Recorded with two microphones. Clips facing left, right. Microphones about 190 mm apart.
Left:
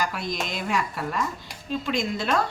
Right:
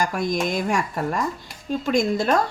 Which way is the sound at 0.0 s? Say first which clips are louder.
Right 6 dB; 45° right (ahead or behind).